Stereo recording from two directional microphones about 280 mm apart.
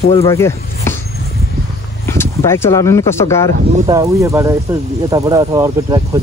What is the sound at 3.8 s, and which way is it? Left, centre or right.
Speech, centre.